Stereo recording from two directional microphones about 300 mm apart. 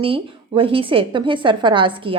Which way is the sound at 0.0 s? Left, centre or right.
Centre.